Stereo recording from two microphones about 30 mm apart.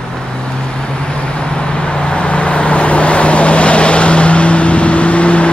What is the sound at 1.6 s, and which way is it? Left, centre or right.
Vehicle, left.